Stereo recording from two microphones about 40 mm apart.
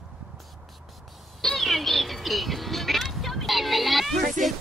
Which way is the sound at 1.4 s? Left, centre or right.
Centre.